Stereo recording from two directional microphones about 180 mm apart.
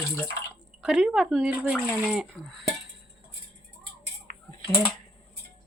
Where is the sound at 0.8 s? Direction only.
Centre (ahead or behind).